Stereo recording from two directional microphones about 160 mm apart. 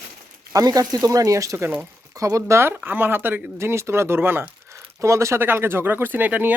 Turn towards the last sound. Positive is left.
turn(degrees=-10)  # may be behind; listen again after turning